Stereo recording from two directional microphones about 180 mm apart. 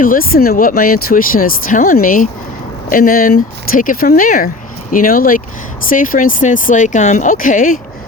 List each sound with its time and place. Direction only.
0.0 s speech: 50° left (ahead or behind)